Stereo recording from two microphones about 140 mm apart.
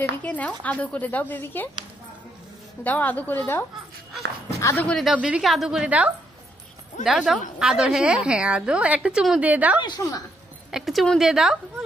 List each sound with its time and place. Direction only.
0.2 s speech: 10° left (ahead or behind)
2.8 s speech: 10° left (ahead or behind)
4.8 s a woman's voice: 5° left (ahead or behind)
5.1 s a woman's voice: 10° right (ahead or behind)
9.8 s a woman's voice: 30° left (ahead or behind)
10.7 s a woman's voice: centre (ahead or behind)